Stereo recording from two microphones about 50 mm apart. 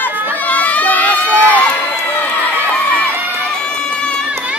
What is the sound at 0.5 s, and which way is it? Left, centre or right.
Crowd, left.